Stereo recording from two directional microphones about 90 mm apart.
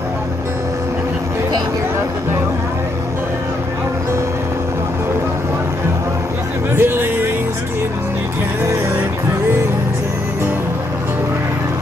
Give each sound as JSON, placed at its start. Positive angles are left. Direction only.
{"t": 6.7, "sound": "music", "side_deg": -25}